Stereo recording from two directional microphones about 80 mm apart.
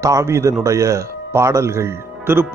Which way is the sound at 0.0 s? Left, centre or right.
Right.